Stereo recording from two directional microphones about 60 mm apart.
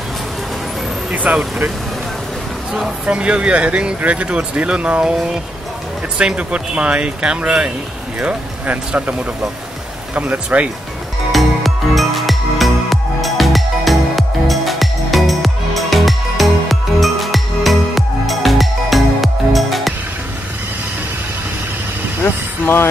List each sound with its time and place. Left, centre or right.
1.1 s speech: right
3.1 s speech: centre
10.1 s speech: right
11.3 s music: centre
22.2 s vehicle: left